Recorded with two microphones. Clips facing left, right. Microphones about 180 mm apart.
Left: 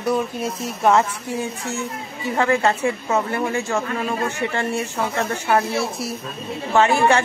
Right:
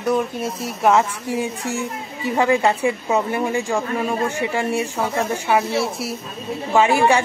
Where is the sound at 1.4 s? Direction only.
15° right (ahead or behind).